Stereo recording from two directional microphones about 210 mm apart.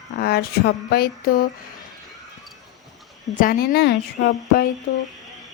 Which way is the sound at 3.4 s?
45° left (ahead or behind).